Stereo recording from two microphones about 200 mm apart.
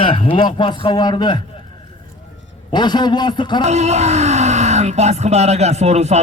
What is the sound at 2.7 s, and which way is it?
Speech, 20° left (ahead or behind).